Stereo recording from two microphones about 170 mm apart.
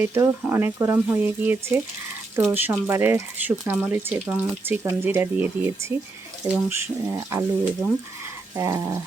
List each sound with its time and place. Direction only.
0.0 s speech: 15° right (ahead or behind)
8.5 s dog: 20° right (ahead or behind)